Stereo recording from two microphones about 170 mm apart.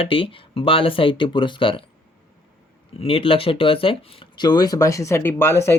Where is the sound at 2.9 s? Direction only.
35° left (ahead or behind); by 5.8 s 15° left (ahead or behind).